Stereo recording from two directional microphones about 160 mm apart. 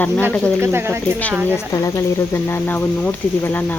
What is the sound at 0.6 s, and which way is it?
Speech, 15° right (ahead or behind).